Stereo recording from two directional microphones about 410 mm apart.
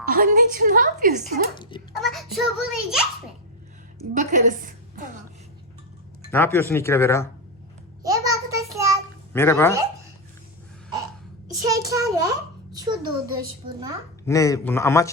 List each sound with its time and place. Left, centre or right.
0.0 s a sound: right
1.2 s a man's voice: centre
2.0 s music: centre
4.1 s a sound: centre
6.3 s speech: centre
8.0 s child singing: centre
9.3 s speech: centre
11.4 s a sound: centre
14.3 s a man's voice: centre